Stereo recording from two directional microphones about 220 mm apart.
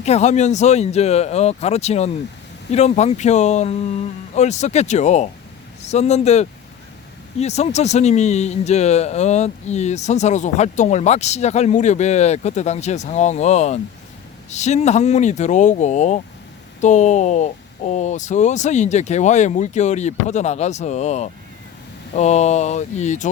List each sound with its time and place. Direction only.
0.0 s speech: 30° left (ahead or behind)